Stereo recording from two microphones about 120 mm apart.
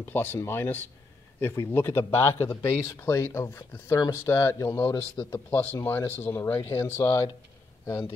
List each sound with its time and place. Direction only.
0.0 s a man's voice: 15° left (ahead or behind)
7.8 s speech: 35° left (ahead or behind)